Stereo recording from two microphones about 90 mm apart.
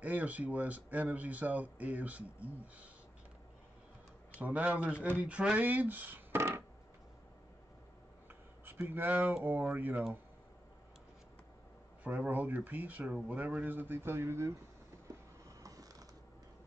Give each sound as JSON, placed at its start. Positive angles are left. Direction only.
{"t": 0.0, "sound": "speech", "side_deg": -15}
{"t": 4.4, "sound": "speech", "side_deg": -15}
{"t": 8.6, "sound": "speech", "side_deg": -25}
{"t": 12.0, "sound": "speech", "side_deg": -20}
{"t": 15.6, "sound": "creak", "side_deg": -40}